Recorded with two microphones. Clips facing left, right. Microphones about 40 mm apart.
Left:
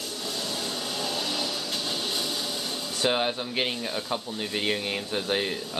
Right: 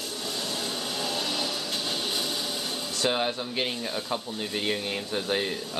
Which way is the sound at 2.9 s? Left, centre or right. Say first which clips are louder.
Left 1 dB; centre.